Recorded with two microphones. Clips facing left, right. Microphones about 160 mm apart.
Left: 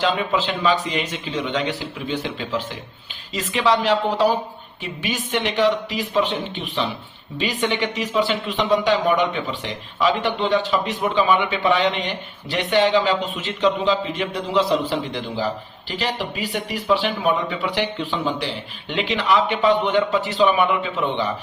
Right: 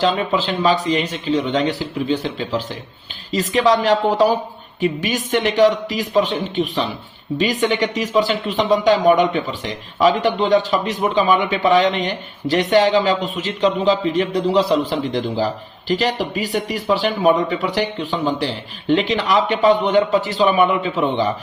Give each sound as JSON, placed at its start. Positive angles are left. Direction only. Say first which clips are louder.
{"t": 0.0, "sound": "a man's voice", "louder": "right 3 dB", "side_deg": -35}